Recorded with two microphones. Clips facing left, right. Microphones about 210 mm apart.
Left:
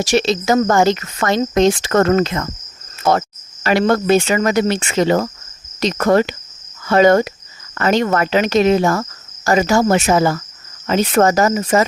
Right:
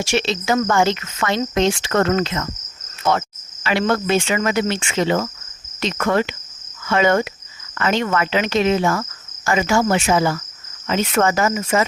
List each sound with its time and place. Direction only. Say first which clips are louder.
0.0 s cricket: left 5 dB; 40° left (ahead or behind)